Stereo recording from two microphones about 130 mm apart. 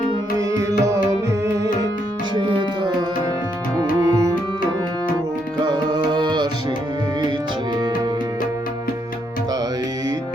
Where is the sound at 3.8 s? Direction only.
25° right (ahead or behind).